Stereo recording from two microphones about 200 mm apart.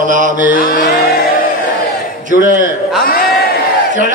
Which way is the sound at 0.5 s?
50° left (ahead or behind).